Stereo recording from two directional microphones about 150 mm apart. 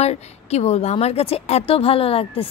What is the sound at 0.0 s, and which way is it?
Speech, 45° left (ahead or behind).